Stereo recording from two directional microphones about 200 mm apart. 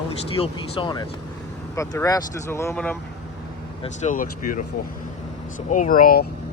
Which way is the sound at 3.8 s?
40° left (ahead or behind).